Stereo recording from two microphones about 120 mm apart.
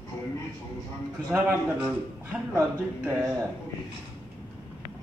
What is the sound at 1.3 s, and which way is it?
A man's voice, 10° right (ahead or behind).